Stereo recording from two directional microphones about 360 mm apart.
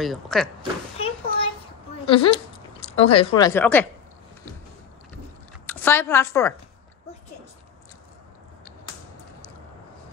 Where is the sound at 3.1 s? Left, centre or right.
Centre.